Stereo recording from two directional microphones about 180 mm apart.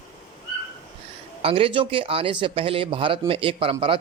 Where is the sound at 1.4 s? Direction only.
30° right (ahead or behind).